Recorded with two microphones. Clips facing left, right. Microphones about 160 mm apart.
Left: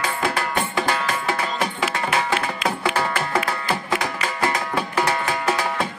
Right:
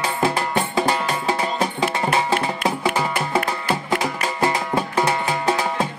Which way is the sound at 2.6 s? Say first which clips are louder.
Even; 15° right (ahead or behind).